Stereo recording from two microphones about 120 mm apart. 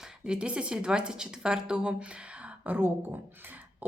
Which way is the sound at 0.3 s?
10° right (ahead or behind).